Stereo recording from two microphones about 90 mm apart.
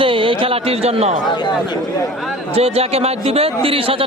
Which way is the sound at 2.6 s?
90° right.